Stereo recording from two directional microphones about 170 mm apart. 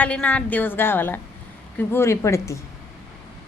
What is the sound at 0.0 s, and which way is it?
A woman's voice, 10° left (ahead or behind).